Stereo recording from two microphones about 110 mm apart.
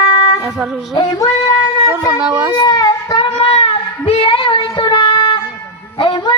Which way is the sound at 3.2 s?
60° left (ahead or behind).